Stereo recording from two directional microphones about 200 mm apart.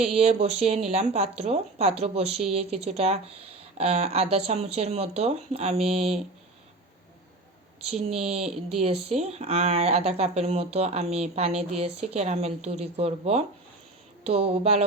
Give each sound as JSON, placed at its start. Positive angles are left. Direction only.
{"t": 0.0, "sound": "speech", "side_deg": -30}
{"t": 7.9, "sound": "speech", "side_deg": -30}